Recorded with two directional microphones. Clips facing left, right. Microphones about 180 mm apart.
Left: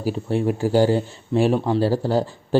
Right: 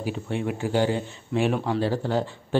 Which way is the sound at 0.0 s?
35° left (ahead or behind).